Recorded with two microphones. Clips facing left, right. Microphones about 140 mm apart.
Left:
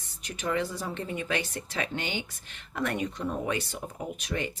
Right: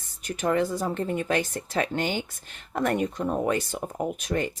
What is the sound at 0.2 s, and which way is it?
Speech, 50° right (ahead or behind).